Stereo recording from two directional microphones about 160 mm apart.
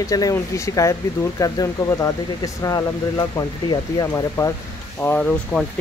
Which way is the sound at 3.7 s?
20° left (ahead or behind).